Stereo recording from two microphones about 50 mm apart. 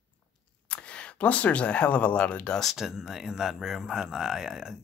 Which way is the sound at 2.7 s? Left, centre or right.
Centre.